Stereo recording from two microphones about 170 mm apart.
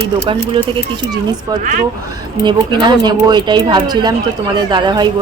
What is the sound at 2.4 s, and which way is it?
Speech, 25° right (ahead or behind).